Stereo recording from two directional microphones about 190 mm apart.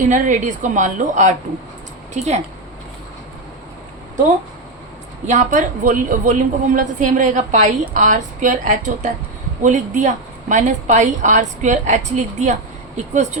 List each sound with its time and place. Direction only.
0.1 s a woman's voice: 40° right (ahead or behind)
5.2 s a woman's voice: 40° right (ahead or behind)